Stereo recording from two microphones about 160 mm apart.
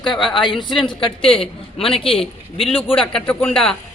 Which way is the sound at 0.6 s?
30° left (ahead or behind).